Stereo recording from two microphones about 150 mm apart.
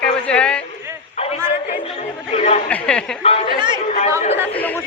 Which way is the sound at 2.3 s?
45° left (ahead or behind).